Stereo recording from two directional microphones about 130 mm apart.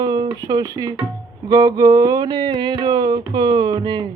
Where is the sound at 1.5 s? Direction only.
30° right (ahead or behind).